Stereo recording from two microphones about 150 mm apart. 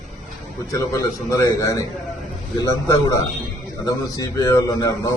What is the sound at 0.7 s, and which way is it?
A man's voice, 20° left (ahead or behind).